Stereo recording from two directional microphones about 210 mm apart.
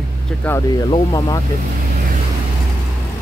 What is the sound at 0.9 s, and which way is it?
Speech, 15° left (ahead or behind).